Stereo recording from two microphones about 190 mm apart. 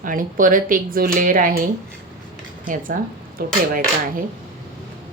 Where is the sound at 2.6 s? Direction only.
45° right (ahead or behind).